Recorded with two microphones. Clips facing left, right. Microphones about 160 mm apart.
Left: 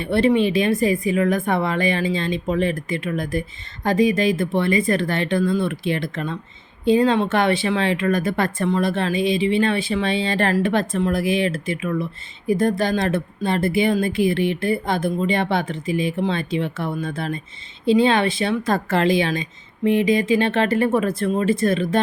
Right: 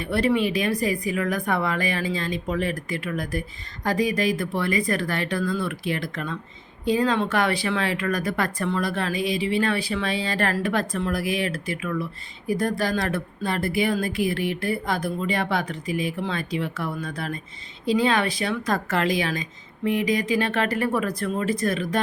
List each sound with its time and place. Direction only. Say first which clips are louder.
0.0 s speech: left 5 dB; 25° left (ahead or behind)